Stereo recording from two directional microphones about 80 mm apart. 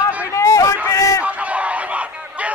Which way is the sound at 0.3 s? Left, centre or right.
Left.